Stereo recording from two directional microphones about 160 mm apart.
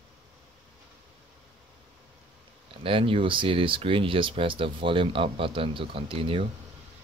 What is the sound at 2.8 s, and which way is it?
Speech, 35° right (ahead or behind).